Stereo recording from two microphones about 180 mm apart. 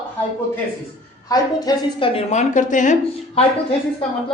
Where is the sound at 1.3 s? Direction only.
20° left (ahead or behind).